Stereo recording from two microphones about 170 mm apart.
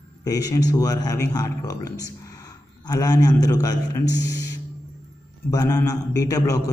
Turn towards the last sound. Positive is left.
turn(degrees=20)  # may be behind; listen again after turning